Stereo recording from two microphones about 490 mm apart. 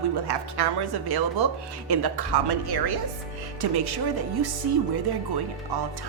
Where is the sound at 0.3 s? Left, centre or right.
Right.